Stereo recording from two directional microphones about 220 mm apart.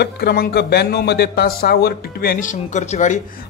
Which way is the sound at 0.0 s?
45° left (ahead or behind).